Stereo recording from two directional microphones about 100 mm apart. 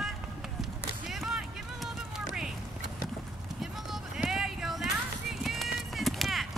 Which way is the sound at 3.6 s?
5° right (ahead or behind).